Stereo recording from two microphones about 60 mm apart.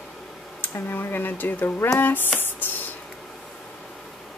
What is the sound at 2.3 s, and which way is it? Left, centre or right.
Music, left.